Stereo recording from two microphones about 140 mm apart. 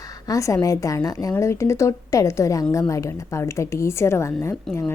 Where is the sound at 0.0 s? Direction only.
25° left (ahead or behind).